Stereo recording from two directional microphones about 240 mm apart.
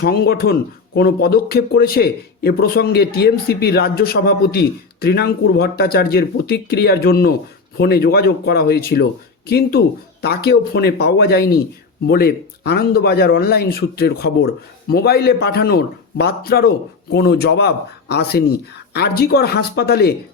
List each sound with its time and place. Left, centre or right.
0.0 s a man's voice: left